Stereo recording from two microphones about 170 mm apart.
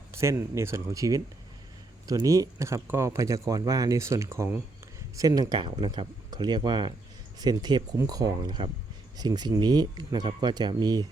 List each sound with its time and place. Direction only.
0.1 s speech: 15° right (ahead or behind)